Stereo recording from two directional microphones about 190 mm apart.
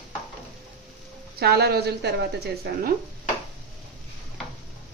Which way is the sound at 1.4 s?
55° right (ahead or behind).